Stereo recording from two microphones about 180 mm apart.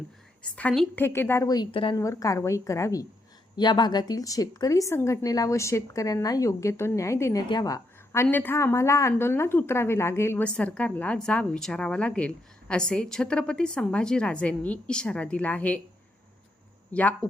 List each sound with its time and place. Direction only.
0.4 s a woman's voice: 5° left (ahead or behind)
16.9 s a woman's voice: 10° left (ahead or behind)